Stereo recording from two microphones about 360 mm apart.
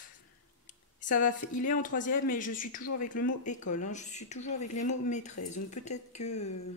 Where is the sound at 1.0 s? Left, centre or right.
Left.